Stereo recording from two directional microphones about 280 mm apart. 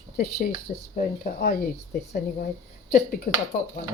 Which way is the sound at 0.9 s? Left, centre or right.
Left.